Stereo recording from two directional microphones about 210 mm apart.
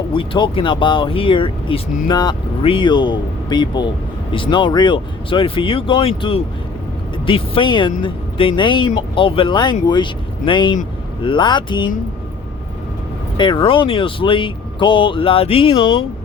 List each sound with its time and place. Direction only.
0.1 s speech: 25° left (ahead or behind)
13.3 s speech: 25° left (ahead or behind)